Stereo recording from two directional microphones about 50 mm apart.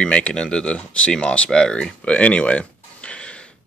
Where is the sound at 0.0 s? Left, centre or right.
Left.